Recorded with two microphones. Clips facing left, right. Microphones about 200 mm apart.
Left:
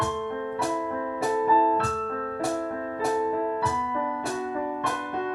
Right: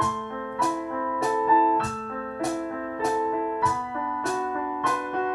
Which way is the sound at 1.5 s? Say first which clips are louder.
Right 1 dB; 15° right (ahead or behind).